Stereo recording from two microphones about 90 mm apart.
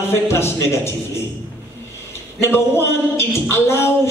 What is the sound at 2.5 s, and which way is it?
Speech, 25° left (ahead or behind).